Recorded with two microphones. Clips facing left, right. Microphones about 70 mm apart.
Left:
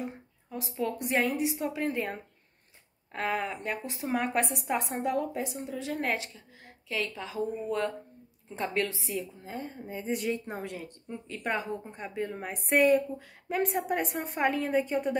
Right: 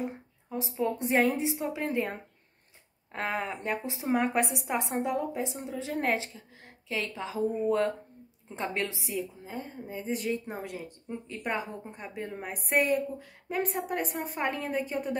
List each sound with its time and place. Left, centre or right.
0.0 s a woman's voice: right
1.6 s speech: centre
4.3 s a woman's voice: centre
9.0 s a woman's voice: centre